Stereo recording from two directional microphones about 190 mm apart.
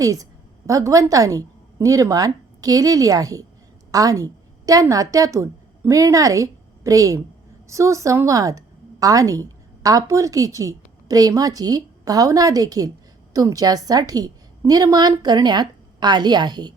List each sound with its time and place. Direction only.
0.0 s a woman's voice: 20° right (ahead or behind)